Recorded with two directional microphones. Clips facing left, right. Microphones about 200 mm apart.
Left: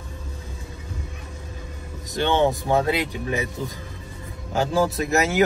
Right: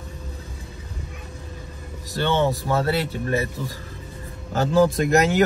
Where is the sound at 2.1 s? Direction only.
15° left (ahead or behind).